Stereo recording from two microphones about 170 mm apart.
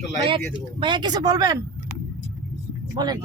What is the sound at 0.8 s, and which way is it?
Speech, 25° right (ahead or behind).